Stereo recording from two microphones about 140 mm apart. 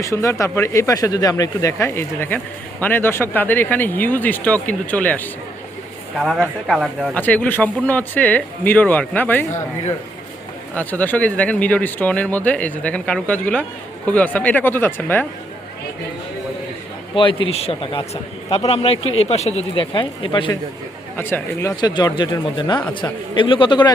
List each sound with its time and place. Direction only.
0.0 s speech: 20° left (ahead or behind)
6.1 s speech: centre (ahead or behind)
7.1 s speech: 10° left (ahead or behind)
10.8 s speech: 10° left (ahead or behind)
17.2 s a man's voice: 40° left (ahead or behind)
21.2 s speech: 15° left (ahead or behind); by 23.9 s 35° left (ahead or behind)